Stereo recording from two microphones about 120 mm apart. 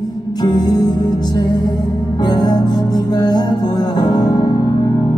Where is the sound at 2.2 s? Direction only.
35° left (ahead or behind).